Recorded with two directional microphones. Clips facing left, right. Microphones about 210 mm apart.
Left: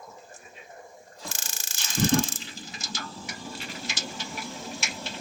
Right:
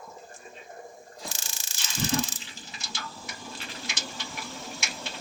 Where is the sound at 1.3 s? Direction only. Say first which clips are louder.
Left 1 dB; 50° left (ahead or behind).